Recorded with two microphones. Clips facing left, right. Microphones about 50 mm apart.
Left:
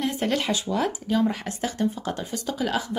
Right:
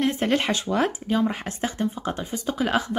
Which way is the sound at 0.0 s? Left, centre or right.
Right.